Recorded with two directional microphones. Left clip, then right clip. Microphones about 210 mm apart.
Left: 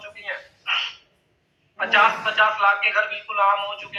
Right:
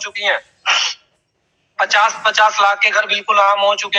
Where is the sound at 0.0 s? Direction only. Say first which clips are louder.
Right 14 dB; 45° right (ahead or behind).